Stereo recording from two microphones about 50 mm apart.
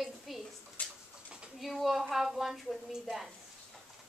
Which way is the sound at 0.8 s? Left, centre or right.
Left.